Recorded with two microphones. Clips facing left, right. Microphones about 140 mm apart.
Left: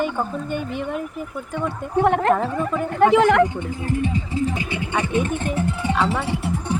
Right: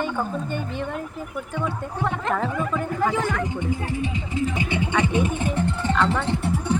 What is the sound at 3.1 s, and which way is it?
Speech, 90° left.